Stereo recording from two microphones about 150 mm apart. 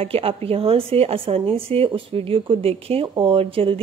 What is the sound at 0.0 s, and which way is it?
Speech, 40° right (ahead or behind).